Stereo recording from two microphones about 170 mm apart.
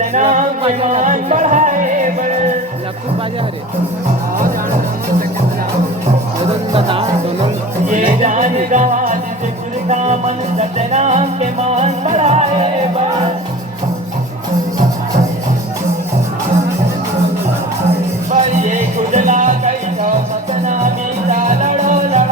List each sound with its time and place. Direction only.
0.0 s music: 50° right (ahead or behind)
8.0 s music: 45° right (ahead or behind)
18.3 s music: 45° right (ahead or behind)